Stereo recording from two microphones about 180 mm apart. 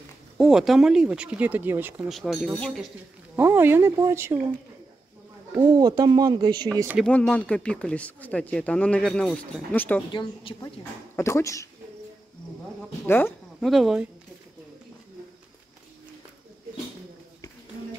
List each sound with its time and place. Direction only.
0.4 s speech: 5° right (ahead or behind)
2.0 s speech: centre (ahead or behind)
3.3 s speech: 10° right (ahead or behind)
5.6 s speech: 25° right (ahead or behind)
7.0 s speech: 5° left (ahead or behind)
10.1 s speech: 20° left (ahead or behind)
13.0 s speech: 10° left (ahead or behind)
13.6 s speech: centre (ahead or behind)